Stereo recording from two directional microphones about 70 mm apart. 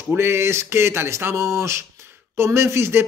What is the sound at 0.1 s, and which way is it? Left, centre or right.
Speech, right.